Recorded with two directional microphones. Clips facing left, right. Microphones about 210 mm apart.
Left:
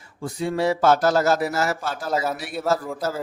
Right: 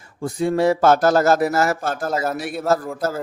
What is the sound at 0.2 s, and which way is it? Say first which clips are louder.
Speech: right 5 dB; 45° right (ahead or behind).